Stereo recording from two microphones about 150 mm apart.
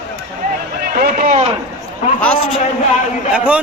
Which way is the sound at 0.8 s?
80° right.